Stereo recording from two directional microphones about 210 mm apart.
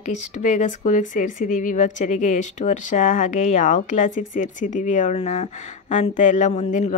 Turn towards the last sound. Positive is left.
turn(degrees=35)  # may be behind; listen again after turning